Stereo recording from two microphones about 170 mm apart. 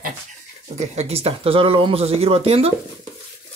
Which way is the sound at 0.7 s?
40° right (ahead or behind).